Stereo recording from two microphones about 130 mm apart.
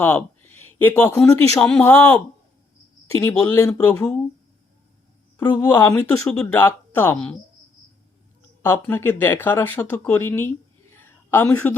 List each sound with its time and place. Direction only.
0.0 s speech: 15° left (ahead or behind)
5.4 s speech: 25° left (ahead or behind)
6.2 s speech: 5° left (ahead or behind)
8.6 s speech: 20° left (ahead or behind)
10.9 s a sound: 15° left (ahead or behind)